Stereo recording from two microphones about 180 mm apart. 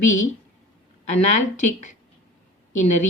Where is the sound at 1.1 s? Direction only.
40° left (ahead or behind).